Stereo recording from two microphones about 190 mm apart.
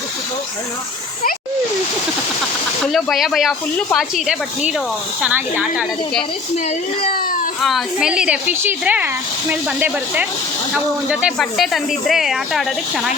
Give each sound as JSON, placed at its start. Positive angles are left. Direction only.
{"t": 2.8, "sound": "speech", "side_deg": 0}
{"t": 7.1, "sound": "speech", "side_deg": 50}
{"t": 7.6, "sound": "speech", "side_deg": 0}